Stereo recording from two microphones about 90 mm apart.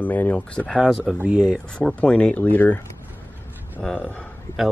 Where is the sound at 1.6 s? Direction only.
10° left (ahead or behind).